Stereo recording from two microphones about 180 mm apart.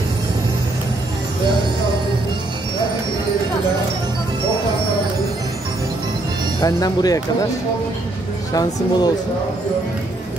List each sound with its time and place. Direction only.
6.6 s speech: 20° left (ahead or behind)
8.5 s speech: 20° left (ahead or behind)